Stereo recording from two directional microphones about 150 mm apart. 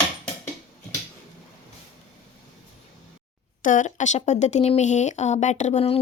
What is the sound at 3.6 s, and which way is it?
Speech, 55° left (ahead or behind).